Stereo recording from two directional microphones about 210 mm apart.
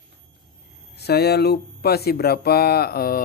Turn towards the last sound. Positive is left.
turn(degrees=45)  # may be behind; listen again after turning